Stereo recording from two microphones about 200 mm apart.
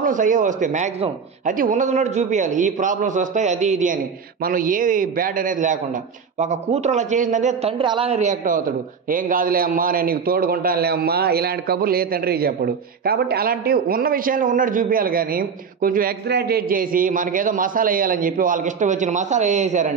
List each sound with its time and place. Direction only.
0.0 s a man's voice: 40° right (ahead or behind)
7.8 s a man's voice: 25° right (ahead or behind)